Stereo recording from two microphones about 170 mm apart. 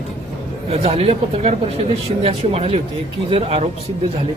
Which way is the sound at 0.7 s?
35° right (ahead or behind).